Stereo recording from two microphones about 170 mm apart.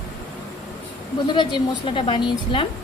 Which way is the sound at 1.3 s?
30° left (ahead or behind).